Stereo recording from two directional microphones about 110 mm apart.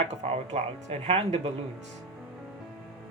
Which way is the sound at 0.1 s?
85° right.